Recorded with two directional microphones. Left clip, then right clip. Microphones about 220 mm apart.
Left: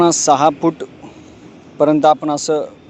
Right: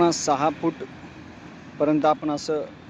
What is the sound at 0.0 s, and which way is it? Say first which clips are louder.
Speech: left 9 dB; 35° left (ahead or behind).